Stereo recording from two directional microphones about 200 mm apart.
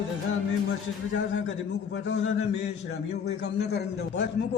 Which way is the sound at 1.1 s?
60° left (ahead or behind).